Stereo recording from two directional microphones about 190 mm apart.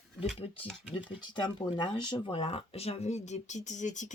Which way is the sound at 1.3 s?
25° left (ahead or behind).